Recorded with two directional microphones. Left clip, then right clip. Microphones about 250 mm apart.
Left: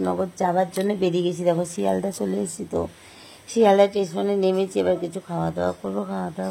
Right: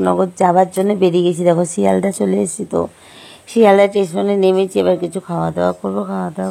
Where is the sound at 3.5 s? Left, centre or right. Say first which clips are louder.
Right 6 dB; right.